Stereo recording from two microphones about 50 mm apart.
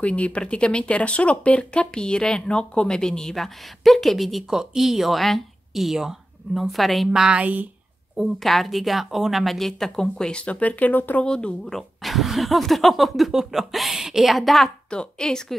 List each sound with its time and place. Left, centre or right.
0.0 s speech: left; by 7.1 s centre
7.3 s speech: right
8.2 s speech: centre
10.4 s speech: left
11.2 s a woman's voice: centre
11.7 s speech: centre
14.9 s a woman's voice: centre